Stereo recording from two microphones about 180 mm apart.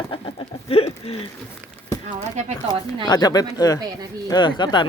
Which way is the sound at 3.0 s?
25° left (ahead or behind).